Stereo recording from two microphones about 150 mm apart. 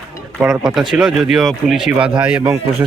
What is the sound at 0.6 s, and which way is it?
Speech, 5° right (ahead or behind).